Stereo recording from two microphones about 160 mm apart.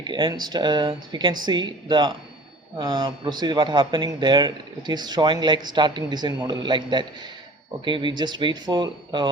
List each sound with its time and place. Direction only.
0.0 s a man's voice: 30° right (ahead or behind)